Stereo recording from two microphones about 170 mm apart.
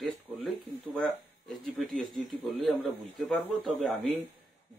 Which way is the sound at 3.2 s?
Centre (ahead or behind).